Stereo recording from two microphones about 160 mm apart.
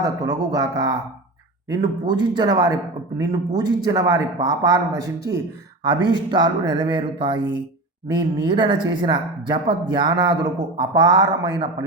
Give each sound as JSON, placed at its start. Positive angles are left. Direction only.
{"t": 0.0, "sound": "speech", "side_deg": -20}